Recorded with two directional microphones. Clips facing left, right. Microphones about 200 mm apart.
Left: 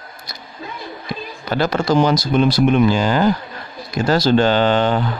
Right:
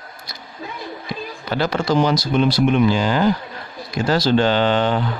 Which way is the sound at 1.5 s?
45° left (ahead or behind).